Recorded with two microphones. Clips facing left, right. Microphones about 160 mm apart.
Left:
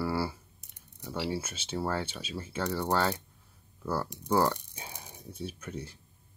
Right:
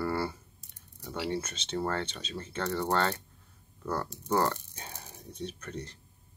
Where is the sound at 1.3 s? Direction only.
10° left (ahead or behind).